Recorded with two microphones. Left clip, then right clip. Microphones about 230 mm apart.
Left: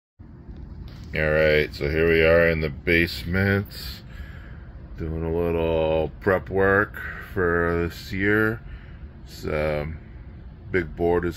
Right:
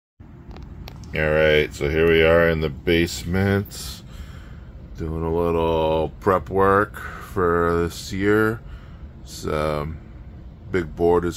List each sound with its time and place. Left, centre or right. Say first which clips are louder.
1.1 s speech: right 2 dB; centre
4.9 s speech: right 3 dB; centre